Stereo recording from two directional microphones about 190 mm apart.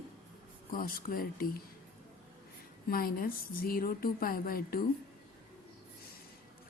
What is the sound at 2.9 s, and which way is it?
A woman's voice, 50° left (ahead or behind).